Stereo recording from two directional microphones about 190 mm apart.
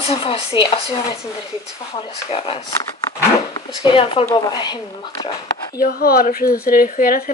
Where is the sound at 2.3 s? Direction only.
30° left (ahead or behind).